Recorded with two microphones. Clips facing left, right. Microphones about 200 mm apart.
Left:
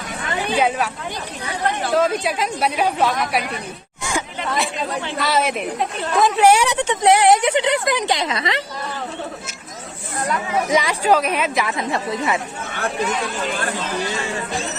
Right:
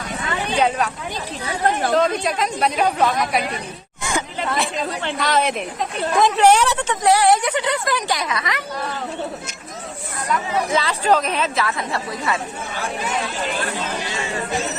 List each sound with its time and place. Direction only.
0.5 s a woman's voice: 5° left (ahead or behind)
1.9 s speech: 5° left (ahead or behind)
4.0 s a sound: centre (ahead or behind)
5.2 s a woman's voice: 5° left (ahead or behind); by 8.6 s 25° left (ahead or behind)
10.7 s a woman's voice: 15° left (ahead or behind)